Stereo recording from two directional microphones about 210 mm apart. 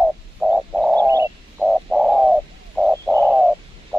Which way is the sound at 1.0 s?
10° right (ahead or behind).